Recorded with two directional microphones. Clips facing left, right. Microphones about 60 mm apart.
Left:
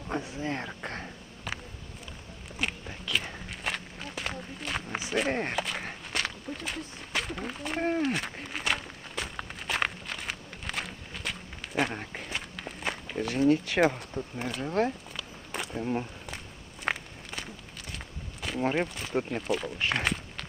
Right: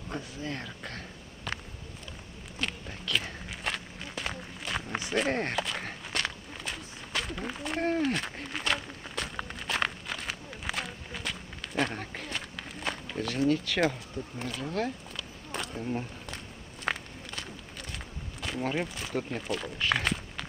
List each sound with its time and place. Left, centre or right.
0.1 s speech: left
1.5 s a sound: centre
2.6 s walk: centre
13.1 s a sound: centre
13.5 s speech: left
15.1 s bee: centre
16.8 s walk: centre
18.6 s speech: left
19.4 s speech: centre
19.9 s speech: centre